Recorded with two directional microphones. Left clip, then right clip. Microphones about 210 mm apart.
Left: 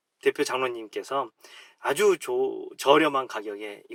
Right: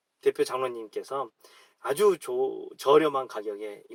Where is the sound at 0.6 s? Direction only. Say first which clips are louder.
Left 2 dB; 40° left (ahead or behind).